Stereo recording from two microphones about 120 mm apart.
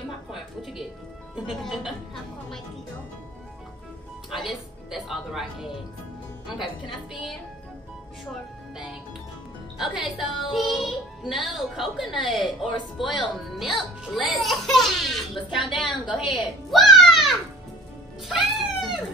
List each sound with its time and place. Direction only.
0.3 s a woman's voice: centre (ahead or behind)
4.3 s speech: centre (ahead or behind)
8.3 s speech: 5° right (ahead or behind)
15.3 s a woman's voice: 40° left (ahead or behind)
16.1 s a child's voice: 5° right (ahead or behind)
18.3 s music: 5° right (ahead or behind)